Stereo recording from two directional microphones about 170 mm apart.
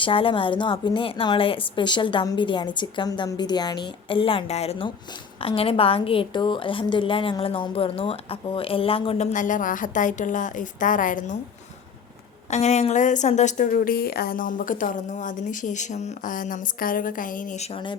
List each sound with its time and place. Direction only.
0.0 s a woman's voice: 30° left (ahead or behind); by 11.3 s 50° left (ahead or behind)
12.5 s a woman's voice: 40° left (ahead or behind)